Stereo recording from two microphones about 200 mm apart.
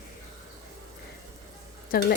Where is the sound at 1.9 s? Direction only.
45° left (ahead or behind).